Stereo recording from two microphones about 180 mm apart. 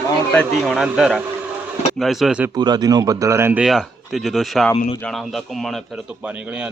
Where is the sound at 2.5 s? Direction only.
25° right (ahead or behind).